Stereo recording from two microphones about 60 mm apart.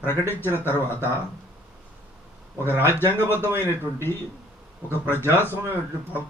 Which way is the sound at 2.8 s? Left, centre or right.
Left.